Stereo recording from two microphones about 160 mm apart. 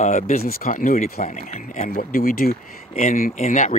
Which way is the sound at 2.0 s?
65° left (ahead or behind).